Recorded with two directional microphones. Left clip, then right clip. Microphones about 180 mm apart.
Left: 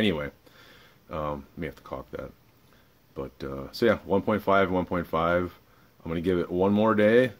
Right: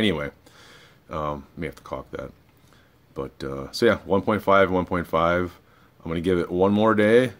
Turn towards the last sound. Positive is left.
turn(degrees=-10)  # may be behind; listen again after turning